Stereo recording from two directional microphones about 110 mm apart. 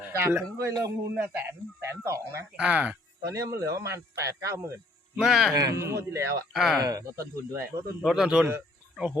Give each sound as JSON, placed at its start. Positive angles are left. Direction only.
{"t": 0.0, "sound": "a man's voice", "side_deg": -20}
{"t": 0.7, "sound": "a man's voice", "side_deg": -35}
{"t": 1.1, "sound": "speech", "side_deg": -20}
{"t": 2.6, "sound": "speech", "side_deg": -10}
{"t": 3.2, "sound": "speech", "side_deg": -30}
{"t": 5.1, "sound": "speech", "side_deg": -5}
{"t": 5.5, "sound": "speech", "side_deg": -30}
{"t": 6.5, "sound": "speech", "side_deg": 0}
{"t": 6.8, "sound": "speech", "side_deg": -30}
{"t": 8.0, "sound": "speech", "side_deg": -5}